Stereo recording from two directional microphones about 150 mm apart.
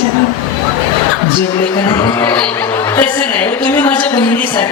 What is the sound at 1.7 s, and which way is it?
A woman's voice, 25° left (ahead or behind).